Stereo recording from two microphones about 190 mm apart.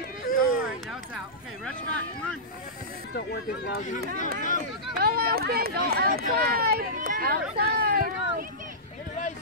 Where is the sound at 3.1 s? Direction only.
60° left (ahead or behind).